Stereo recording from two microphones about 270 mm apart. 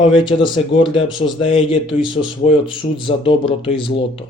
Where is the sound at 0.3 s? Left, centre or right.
Centre.